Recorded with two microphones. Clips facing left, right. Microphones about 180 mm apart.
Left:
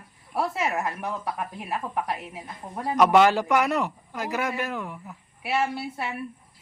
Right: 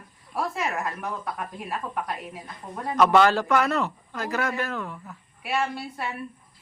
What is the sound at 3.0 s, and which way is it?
A man's voice, 15° left (ahead or behind).